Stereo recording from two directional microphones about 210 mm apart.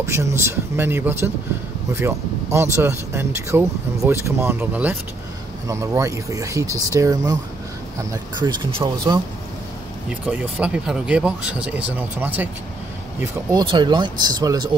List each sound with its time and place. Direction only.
0.0 s speech: 10° right (ahead or behind)
10.2 s speech: 5° right (ahead or behind)